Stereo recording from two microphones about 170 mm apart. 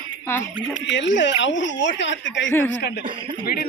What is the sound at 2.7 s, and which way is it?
Speech, 70° left (ahead or behind).